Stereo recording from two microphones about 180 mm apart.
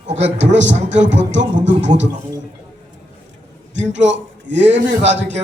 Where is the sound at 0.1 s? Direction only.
80° right.